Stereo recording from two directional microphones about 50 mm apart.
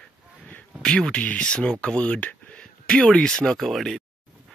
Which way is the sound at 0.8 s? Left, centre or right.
Centre.